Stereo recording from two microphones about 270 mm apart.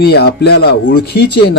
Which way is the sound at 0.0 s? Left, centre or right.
Left.